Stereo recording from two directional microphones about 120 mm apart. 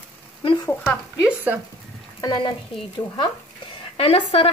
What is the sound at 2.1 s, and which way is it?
Speech, 35° left (ahead or behind).